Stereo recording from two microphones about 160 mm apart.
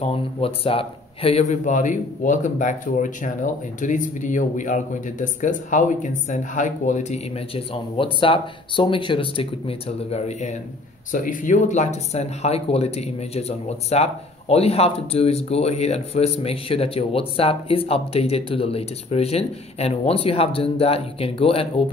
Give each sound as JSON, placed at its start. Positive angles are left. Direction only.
{"t": 0.0, "sound": "speech", "side_deg": 35}
{"t": 11.1, "sound": "speech", "side_deg": 55}